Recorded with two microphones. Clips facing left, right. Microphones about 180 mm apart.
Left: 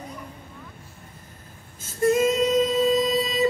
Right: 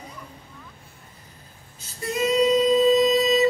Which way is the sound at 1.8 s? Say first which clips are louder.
Left 6 dB; 50° left (ahead or behind).